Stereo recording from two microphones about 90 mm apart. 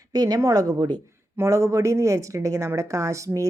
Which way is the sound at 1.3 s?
30° right (ahead or behind).